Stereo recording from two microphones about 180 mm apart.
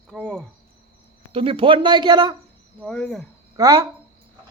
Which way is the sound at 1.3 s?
30° right (ahead or behind).